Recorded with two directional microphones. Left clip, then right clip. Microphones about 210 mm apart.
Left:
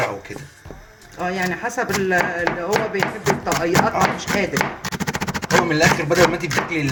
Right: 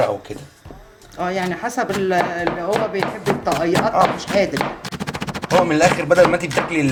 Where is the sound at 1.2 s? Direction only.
5° right (ahead or behind).